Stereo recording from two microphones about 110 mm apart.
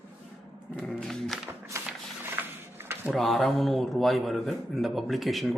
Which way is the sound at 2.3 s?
20° right (ahead or behind).